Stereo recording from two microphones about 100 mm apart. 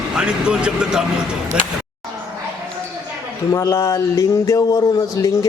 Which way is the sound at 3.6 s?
25° left (ahead or behind).